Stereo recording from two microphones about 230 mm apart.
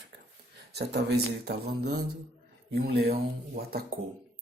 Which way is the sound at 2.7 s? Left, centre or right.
Right.